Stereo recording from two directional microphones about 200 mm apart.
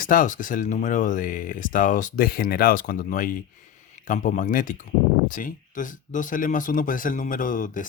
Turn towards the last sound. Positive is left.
turn(degrees=40)  # may be behind; listen again after turning